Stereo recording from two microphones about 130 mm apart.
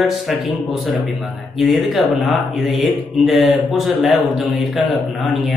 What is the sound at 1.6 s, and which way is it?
Speech, centre (ahead or behind).